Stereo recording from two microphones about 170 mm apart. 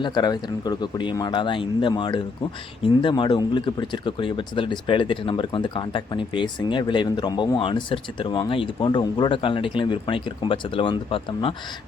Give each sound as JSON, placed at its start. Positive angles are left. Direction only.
{"t": 0.0, "sound": "speech", "side_deg": 25}